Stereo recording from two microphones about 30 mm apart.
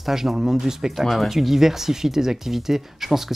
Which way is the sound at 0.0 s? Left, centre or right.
Centre.